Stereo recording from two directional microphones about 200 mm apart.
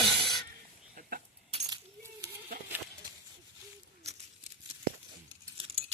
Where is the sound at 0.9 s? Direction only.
45° right (ahead or behind).